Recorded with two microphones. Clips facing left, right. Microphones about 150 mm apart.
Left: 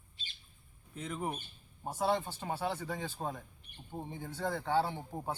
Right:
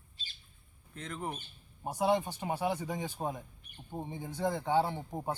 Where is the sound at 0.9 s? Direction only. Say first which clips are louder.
Left 1 dB; 5° left (ahead or behind).